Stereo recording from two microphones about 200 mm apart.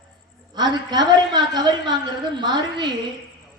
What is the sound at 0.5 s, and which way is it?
A man's voice, 20° right (ahead or behind).